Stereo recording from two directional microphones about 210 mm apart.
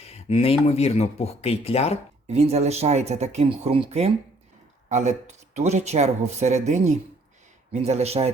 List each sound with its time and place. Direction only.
0.1 s speech: 30° left (ahead or behind)
2.2 s speech: 30° right (ahead or behind)